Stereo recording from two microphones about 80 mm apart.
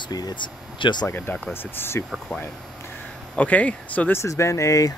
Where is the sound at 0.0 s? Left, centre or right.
Left.